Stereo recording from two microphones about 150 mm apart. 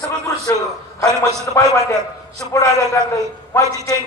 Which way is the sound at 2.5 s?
20° left (ahead or behind).